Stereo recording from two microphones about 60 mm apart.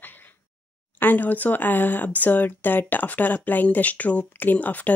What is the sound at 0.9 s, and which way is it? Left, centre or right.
Speech, left.